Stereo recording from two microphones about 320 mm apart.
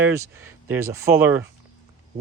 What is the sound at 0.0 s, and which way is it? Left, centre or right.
Speech, centre.